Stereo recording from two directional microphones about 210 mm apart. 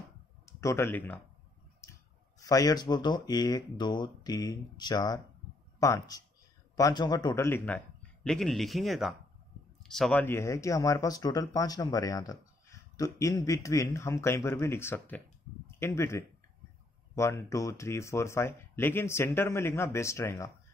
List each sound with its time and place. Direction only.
0.5 s speech: 15° left (ahead or behind)
1.8 s clicking: 15° left (ahead or behind)
2.4 s speech: 15° left (ahead or behind)